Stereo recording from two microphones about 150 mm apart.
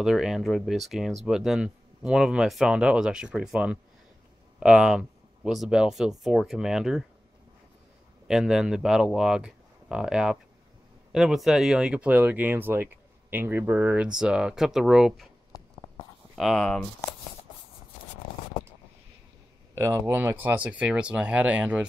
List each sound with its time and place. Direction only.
0.0 s speech: 5° right (ahead or behind)
8.3 s speech: 5° right (ahead or behind)
15.5 s a sound: 25° left (ahead or behind)
16.3 s speech: centre (ahead or behind)
19.7 s speech: 15° right (ahead or behind)